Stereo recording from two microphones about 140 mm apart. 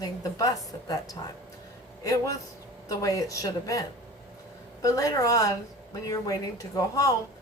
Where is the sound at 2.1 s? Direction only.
25° left (ahead or behind).